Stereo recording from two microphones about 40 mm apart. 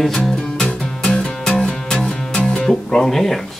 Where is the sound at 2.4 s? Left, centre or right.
Centre.